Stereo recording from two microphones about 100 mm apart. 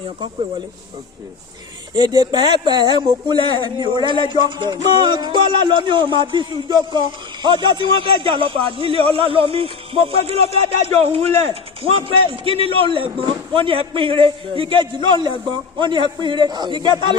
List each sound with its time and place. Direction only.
2.0 s speech: 45° right (ahead or behind)